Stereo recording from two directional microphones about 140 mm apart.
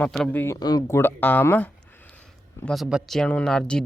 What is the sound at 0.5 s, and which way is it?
Speech, 30° left (ahead or behind).